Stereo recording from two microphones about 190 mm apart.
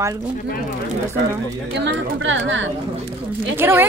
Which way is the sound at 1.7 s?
75° right (ahead or behind).